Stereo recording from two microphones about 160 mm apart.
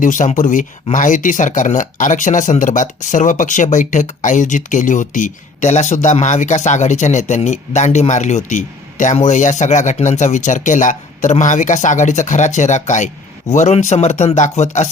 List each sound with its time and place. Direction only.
0.0 s speech: 55° left (ahead or behind)